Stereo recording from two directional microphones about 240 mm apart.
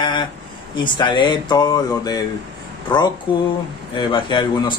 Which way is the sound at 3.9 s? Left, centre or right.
Centre.